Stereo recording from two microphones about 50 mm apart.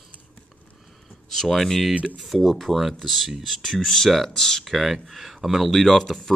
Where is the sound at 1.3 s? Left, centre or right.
Centre.